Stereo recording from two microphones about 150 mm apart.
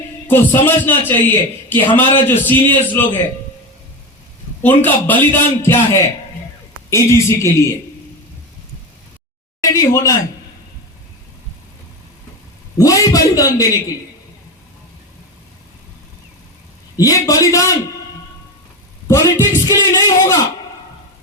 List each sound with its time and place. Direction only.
0.3 s a man's voice: 15° left (ahead or behind)
4.6 s a man's voice: 10° left (ahead or behind)
9.6 s speech: 20° left (ahead or behind)
12.7 s a man's voice: 20° left (ahead or behind)
17.0 s a man's voice: 25° left (ahead or behind)
19.0 s a man's voice: 20° left (ahead or behind)